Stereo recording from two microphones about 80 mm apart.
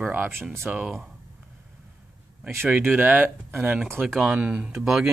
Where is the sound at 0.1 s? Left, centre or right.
Right.